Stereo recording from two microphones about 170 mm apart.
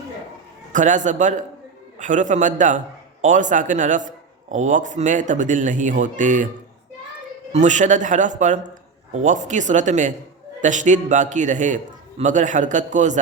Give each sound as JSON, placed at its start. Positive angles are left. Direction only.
{"t": 0.7, "sound": "a man's voice", "side_deg": -45}
{"t": 7.5, "sound": "a man's voice", "side_deg": -45}